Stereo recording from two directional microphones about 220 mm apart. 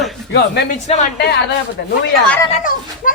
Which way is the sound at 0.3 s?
50° left (ahead or behind).